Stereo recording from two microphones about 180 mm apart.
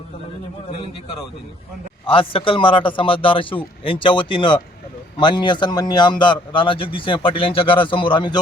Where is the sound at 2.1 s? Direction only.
30° left (ahead or behind).